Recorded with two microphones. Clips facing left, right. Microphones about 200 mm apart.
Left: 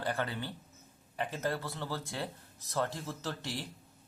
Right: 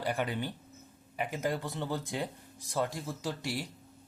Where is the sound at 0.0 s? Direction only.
15° right (ahead or behind).